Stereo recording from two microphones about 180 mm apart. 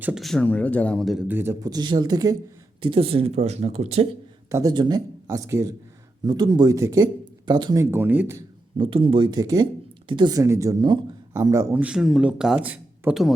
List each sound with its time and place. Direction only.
0.0 s speech: centre (ahead or behind); by 4.0 s 35° right (ahead or behind)
4.4 s speech: 20° right (ahead or behind)
8.8 s speech: 30° right (ahead or behind); by 13.3 s 5° right (ahead or behind)